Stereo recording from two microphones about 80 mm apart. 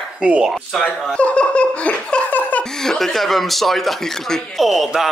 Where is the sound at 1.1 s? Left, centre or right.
Centre.